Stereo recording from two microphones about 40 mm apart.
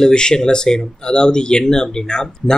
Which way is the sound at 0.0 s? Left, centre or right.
Centre.